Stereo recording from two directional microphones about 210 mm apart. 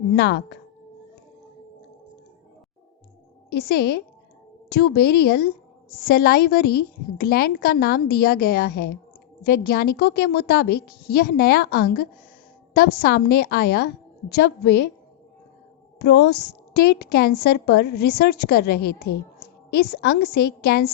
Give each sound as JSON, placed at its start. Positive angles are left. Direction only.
{"t": 0.1, "sound": "speech", "side_deg": 55}
{"t": 4.7, "sound": "a woman's voice", "side_deg": 50}
{"t": 16.0, "sound": "a woman's voice", "side_deg": 55}